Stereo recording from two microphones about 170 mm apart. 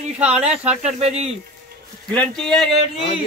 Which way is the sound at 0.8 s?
40° right (ahead or behind).